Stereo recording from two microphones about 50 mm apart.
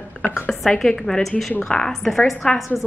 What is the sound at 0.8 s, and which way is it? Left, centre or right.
Speech, centre.